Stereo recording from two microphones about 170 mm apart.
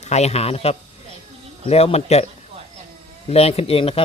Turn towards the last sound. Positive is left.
turn(degrees=35)  # may be behind; listen again after turning